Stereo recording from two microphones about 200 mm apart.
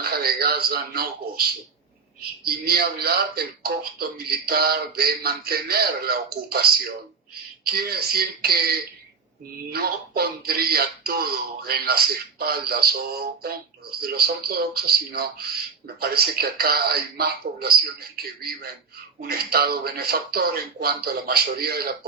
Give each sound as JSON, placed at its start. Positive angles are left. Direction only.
{"t": 0.0, "sound": "speech", "side_deg": -50}